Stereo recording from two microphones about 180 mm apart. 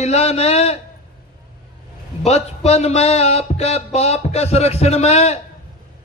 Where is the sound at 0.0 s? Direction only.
35° left (ahead or behind).